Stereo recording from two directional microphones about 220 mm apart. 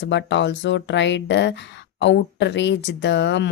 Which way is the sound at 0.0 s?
55° left (ahead or behind).